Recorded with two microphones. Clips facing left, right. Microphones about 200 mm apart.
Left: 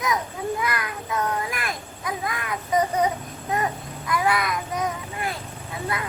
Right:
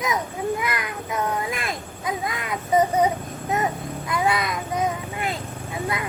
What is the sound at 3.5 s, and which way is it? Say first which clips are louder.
A child's voice: right 1 dB; 25° right (ahead or behind).